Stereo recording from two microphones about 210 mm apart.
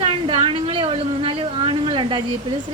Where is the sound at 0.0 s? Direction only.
25° right (ahead or behind).